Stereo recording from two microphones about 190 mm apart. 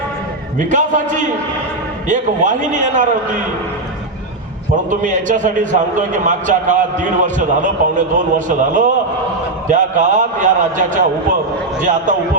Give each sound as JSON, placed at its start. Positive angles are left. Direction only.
{"t": 0.6, "sound": "a man's voice", "side_deg": -40}
{"t": 4.9, "sound": "a man's voice", "side_deg": -40}